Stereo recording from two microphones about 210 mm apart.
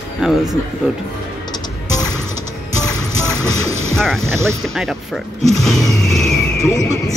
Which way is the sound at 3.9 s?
Centre (ahead or behind).